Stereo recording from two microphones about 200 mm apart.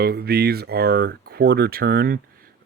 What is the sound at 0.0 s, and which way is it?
Speech, 50° right (ahead or behind).